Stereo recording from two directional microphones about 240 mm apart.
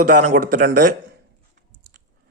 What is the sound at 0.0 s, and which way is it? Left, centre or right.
Speech, right.